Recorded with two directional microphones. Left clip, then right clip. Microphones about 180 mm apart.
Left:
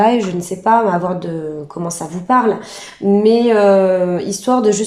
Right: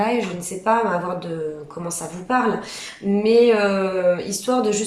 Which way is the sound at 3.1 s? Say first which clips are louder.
Left 3 dB; 40° left (ahead or behind).